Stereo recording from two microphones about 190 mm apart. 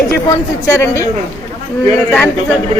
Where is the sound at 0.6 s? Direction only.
15° left (ahead or behind).